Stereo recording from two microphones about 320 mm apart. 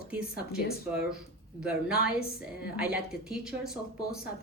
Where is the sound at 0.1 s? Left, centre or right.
Centre.